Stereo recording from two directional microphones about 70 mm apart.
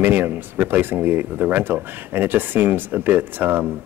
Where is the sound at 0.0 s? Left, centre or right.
Right.